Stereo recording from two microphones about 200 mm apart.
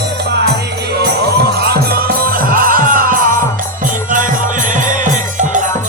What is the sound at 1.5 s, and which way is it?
Music, 50° right (ahead or behind).